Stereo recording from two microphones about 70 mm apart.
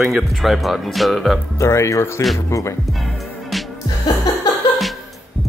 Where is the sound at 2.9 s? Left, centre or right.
Centre.